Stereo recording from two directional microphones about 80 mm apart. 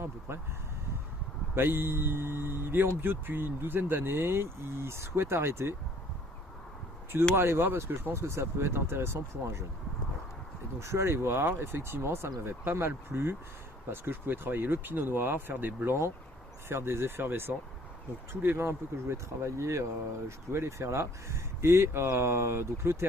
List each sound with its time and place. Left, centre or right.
0.3 s speech: right
1.5 s speech: right
7.3 s speech: right
10.8 s speech: right